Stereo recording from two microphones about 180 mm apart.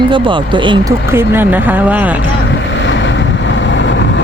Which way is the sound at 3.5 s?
90° left.